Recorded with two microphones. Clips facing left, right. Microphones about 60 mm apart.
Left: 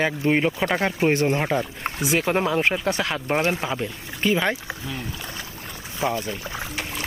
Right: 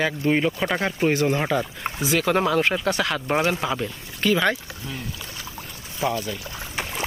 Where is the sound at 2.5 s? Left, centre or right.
Left.